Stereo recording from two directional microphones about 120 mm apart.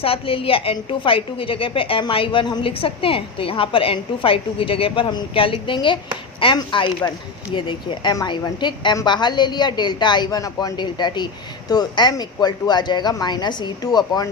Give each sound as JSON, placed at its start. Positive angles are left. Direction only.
{"t": 0.0, "sound": "a woman's voice", "side_deg": 50}